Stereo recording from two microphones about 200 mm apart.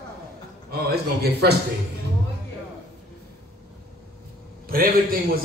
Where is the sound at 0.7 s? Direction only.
55° right (ahead or behind).